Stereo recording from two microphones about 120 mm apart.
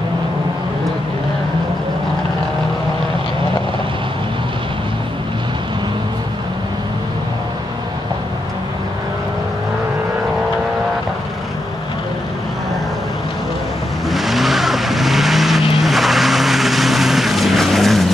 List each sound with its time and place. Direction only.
14.0 s vehicle: centre (ahead or behind)